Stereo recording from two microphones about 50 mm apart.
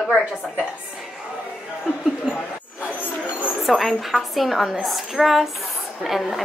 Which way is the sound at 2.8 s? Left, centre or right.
Left.